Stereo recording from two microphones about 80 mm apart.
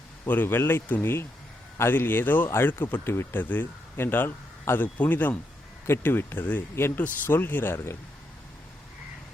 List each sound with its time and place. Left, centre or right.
0.3 s speech: left